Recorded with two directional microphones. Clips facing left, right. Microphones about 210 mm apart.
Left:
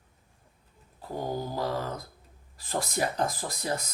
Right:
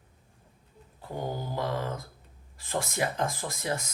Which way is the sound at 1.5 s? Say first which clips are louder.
Even; 35° left (ahead or behind).